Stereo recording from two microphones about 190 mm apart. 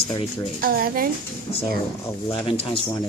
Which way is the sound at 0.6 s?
50° right (ahead or behind).